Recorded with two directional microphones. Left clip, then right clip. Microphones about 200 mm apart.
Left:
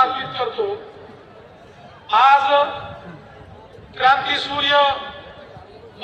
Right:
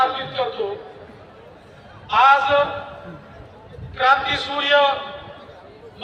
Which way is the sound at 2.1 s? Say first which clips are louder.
Left 1 dB; 25° left (ahead or behind).